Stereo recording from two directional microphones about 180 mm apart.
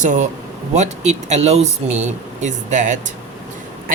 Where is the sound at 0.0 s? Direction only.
45° right (ahead or behind).